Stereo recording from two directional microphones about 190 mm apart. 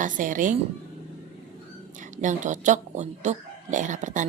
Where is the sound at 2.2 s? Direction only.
40° right (ahead or behind).